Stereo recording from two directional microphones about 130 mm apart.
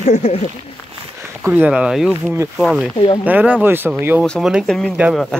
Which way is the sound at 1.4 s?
10° right (ahead or behind).